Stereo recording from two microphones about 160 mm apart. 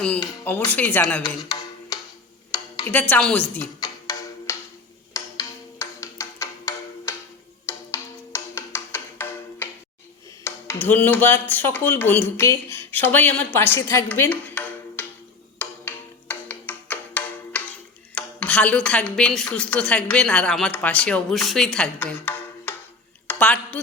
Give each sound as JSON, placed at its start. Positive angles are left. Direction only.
{"t": 0.7, "sound": "speech", "side_deg": 10}
{"t": 1.4, "sound": "a sound", "side_deg": 25}
{"t": 2.9, "sound": "speech", "side_deg": 10}
{"t": 3.8, "sound": "music", "side_deg": 25}
{"t": 5.1, "sound": "a sound", "side_deg": 20}
{"t": 7.7, "sound": "music", "side_deg": 15}
{"t": 10.4, "sound": "speech", "side_deg": 15}
{"t": 15.5, "sound": "music", "side_deg": 10}
{"t": 18.1, "sound": "speech", "side_deg": 10}
{"t": 23.2, "sound": "a sound", "side_deg": 10}